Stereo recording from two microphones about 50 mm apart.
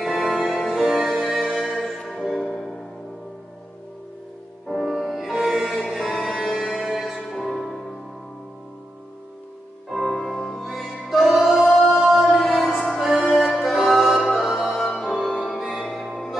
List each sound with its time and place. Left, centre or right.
0.0 s music: centre
4.6 s music: centre
5.7 s a sound: centre
6.7 s music: centre
10.0 s music: centre
15.6 s music: centre